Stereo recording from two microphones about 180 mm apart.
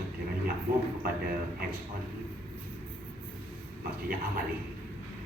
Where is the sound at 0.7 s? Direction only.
50° right (ahead or behind).